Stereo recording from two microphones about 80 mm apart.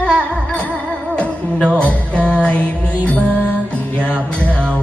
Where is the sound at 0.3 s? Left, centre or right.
Centre.